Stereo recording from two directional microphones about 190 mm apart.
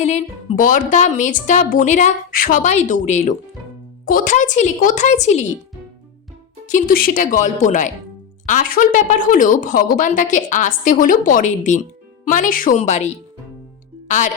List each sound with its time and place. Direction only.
0.0 s speech: 35° left (ahead or behind)
6.7 s a woman's voice: 45° left (ahead or behind)